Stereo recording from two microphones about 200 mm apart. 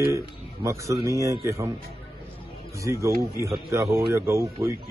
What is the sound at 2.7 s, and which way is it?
A man's voice, 15° right (ahead or behind).